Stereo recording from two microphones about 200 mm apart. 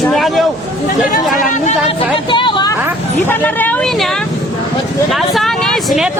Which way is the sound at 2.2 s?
25° left (ahead or behind).